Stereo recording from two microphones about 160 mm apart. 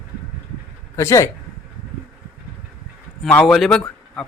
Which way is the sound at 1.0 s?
20° left (ahead or behind).